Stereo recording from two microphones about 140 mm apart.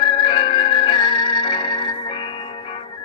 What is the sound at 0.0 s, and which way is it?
Music, 40° left (ahead or behind).